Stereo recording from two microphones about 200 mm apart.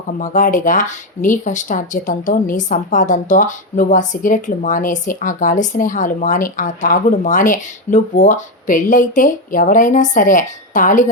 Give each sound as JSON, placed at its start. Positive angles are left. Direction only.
{"t": 0.2, "sound": "speech", "side_deg": 40}